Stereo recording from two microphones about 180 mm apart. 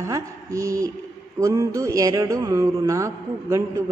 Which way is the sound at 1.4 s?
20° right (ahead or behind).